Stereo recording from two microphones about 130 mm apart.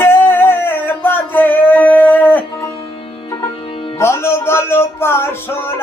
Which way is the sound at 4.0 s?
20° left (ahead or behind).